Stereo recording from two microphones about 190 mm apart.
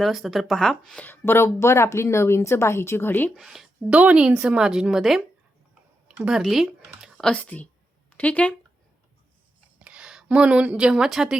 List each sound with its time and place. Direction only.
0.0 s speech: centre (ahead or behind)
3.3 s a woman's voice: centre (ahead or behind)
9.7 s a woman's voice: 5° right (ahead or behind)